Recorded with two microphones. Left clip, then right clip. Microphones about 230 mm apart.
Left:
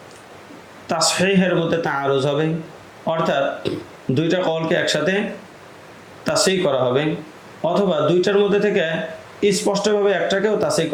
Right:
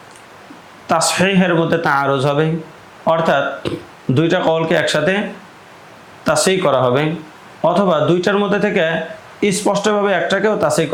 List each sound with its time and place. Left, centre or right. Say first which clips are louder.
0.9 s speech: right 3 dB; right
6.2 s speech: right 4 dB; right